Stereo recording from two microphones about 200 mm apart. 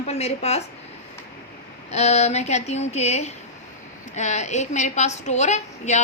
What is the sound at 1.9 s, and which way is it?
A woman's voice, 30° left (ahead or behind).